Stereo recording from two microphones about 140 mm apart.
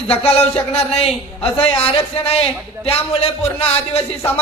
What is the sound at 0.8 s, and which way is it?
A man's voice, 45° left (ahead or behind).